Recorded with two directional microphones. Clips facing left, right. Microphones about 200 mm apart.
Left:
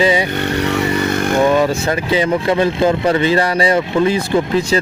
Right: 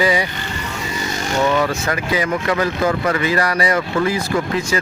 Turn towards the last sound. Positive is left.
turn(degrees=30)  # may be behind; listen again after turning